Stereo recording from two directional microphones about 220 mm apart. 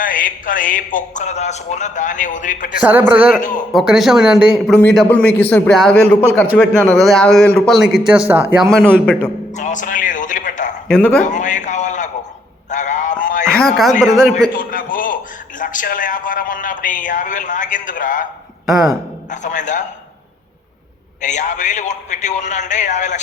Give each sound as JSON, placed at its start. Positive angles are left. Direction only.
{"t": 0.0, "sound": "a man's voice", "side_deg": 40}
{"t": 3.1, "sound": "a man's voice", "side_deg": -5}
{"t": 8.7, "sound": "a man's voice", "side_deg": 5}
{"t": 9.6, "sound": "a man's voice", "side_deg": 35}
{"t": 10.8, "sound": "a man's voice", "side_deg": 5}
{"t": 11.3, "sound": "a man's voice", "side_deg": 35}
{"t": 12.7, "sound": "a sound", "side_deg": 35}
{"t": 13.5, "sound": "a man's voice", "side_deg": 5}
{"t": 14.5, "sound": "a man's voice", "side_deg": 40}
{"t": 19.3, "sound": "a man's voice", "side_deg": 35}
{"t": 21.2, "sound": "a man's voice", "side_deg": 35}